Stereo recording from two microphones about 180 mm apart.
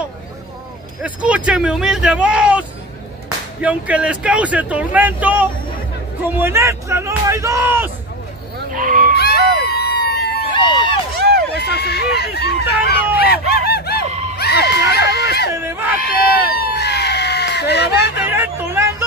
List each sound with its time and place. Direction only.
1.0 s speech: 5° right (ahead or behind)
3.6 s speech: 10° right (ahead or behind)
8.7 s goat: 50° right (ahead or behind)
9.1 s crowd: 65° left (ahead or behind)
9.6 s a sound: 65° left (ahead or behind)
10.5 s run: 25° left (ahead or behind)
11.1 s run: 60° right (ahead or behind)
11.5 s speech: 65° left (ahead or behind)
13.2 s a sound: 60° left (ahead or behind)
14.3 s crowd: 65° left (ahead or behind)
15.5 s speech: 15° right (ahead or behind)
16.7 s screaming: 65° left (ahead or behind)
18.3 s speech: 10° right (ahead or behind)